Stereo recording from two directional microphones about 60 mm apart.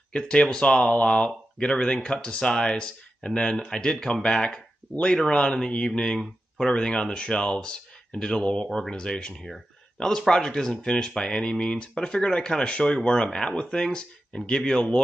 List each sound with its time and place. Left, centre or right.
0.1 s speech: centre